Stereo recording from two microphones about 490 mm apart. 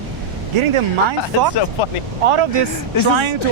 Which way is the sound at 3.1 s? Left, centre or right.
Right.